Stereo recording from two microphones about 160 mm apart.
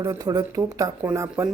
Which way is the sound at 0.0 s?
20° right (ahead or behind).